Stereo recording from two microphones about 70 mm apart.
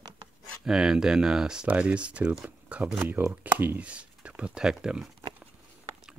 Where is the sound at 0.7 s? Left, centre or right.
Centre.